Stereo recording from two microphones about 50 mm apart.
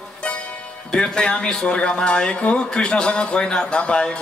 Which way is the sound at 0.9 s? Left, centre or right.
Centre.